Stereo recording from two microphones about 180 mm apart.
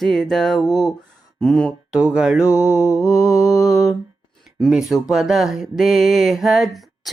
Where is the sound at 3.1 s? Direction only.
Centre (ahead or behind).